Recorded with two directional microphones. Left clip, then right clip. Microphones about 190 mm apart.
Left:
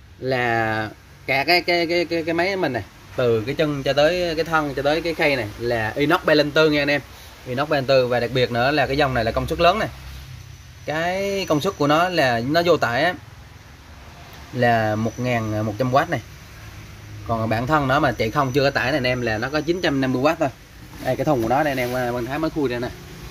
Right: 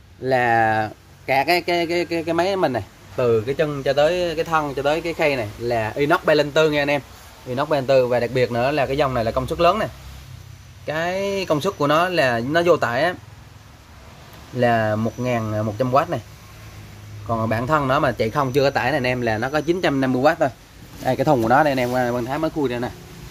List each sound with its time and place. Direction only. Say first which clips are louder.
0.2 s speech: right 4 dB; 10° right (ahead or behind)
3.2 s speech: right 1 dB; centre (ahead or behind)
10.9 s speech: even; centre (ahead or behind)
14.6 s speech: even; centre (ahead or behind)
17.3 s speech: even; 5° right (ahead or behind)